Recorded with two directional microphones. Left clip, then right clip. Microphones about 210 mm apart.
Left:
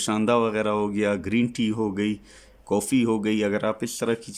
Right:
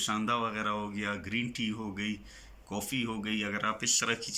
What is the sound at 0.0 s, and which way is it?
Speech, 45° left (ahead or behind).